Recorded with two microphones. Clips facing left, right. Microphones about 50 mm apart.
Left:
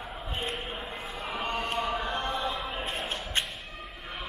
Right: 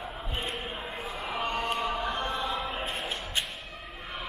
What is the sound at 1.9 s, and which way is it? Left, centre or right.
Chant, left.